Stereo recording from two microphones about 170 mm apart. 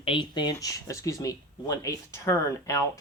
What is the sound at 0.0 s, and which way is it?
Speech, 30° left (ahead or behind).